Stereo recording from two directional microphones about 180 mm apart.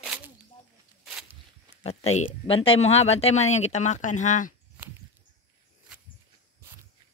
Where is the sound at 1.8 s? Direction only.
35° left (ahead or behind).